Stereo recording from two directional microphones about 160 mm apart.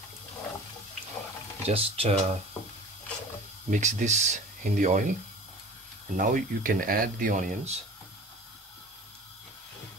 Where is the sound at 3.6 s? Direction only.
50° right (ahead or behind).